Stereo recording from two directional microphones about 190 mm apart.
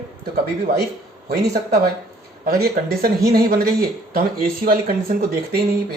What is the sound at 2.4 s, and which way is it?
Speech, 50° right (ahead or behind).